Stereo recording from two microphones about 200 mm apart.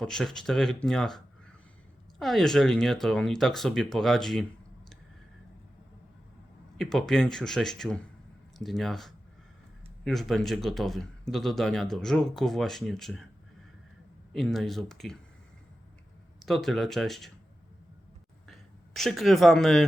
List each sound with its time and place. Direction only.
0.0 s speech: centre (ahead or behind)
6.7 s speech: centre (ahead or behind)
14.3 s speech: centre (ahead or behind)
16.5 s speech: centre (ahead or behind)
18.4 s speech: centre (ahead or behind)